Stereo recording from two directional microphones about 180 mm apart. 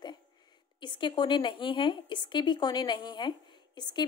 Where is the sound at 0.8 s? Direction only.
25° left (ahead or behind).